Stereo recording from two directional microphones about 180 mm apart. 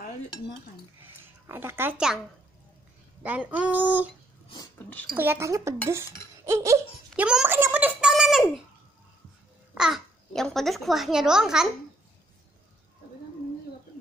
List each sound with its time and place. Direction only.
1.0 s a sound: 10° right (ahead or behind)
3.2 s speech: 10° right (ahead or behind)
4.7 s speech: 10° left (ahead or behind)
5.1 s speech: 10° right (ahead or behind)
6.4 s laughter: 15° right (ahead or behind)
7.1 s a sound: 5° right (ahead or behind)
9.8 s a child's voice: centre (ahead or behind)